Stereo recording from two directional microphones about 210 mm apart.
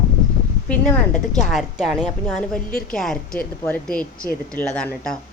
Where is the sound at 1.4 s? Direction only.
Centre (ahead or behind).